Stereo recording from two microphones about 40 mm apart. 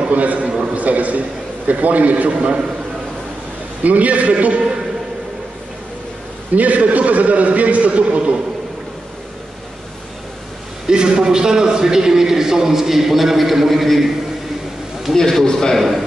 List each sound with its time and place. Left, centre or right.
0.1 s a man's voice: right
3.8 s a man's voice: right
6.5 s a man's voice: right
10.9 s a man's voice: centre
15.1 s a man's voice: centre